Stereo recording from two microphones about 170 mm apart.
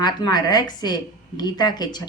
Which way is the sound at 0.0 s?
25° left (ahead or behind).